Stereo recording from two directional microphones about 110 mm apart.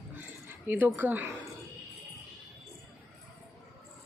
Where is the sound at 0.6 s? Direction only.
15° right (ahead or behind).